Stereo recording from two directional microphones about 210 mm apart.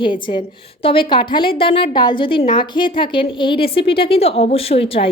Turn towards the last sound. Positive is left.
turn(degrees=25)  # may be behind; listen again after turning